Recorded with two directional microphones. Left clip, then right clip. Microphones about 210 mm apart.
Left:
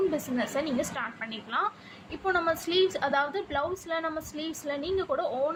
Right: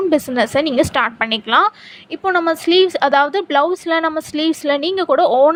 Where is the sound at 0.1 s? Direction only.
45° right (ahead or behind).